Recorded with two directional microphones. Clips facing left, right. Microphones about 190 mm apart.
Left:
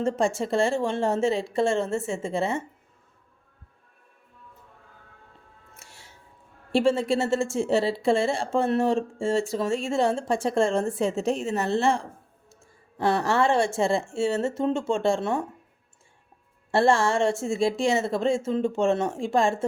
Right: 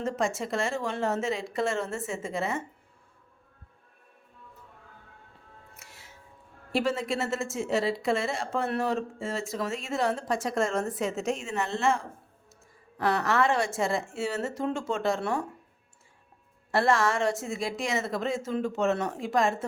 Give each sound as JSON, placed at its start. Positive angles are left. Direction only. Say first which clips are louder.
{"t": 0.0, "sound": "speech", "louder": "left 5 dB", "side_deg": 30}
{"t": 5.7, "sound": "music", "louder": "left 1 dB", "side_deg": 30}
{"t": 6.7, "sound": "speech", "louder": "left 6 dB", "side_deg": 30}
{"t": 16.7, "sound": "speech", "louder": "left 4 dB", "side_deg": 30}